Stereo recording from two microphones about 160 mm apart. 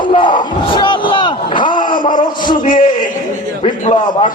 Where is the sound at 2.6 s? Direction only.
55° left (ahead or behind).